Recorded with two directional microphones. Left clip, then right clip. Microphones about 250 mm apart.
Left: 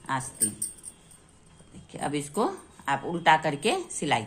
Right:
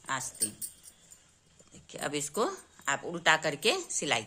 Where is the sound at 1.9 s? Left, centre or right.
Right.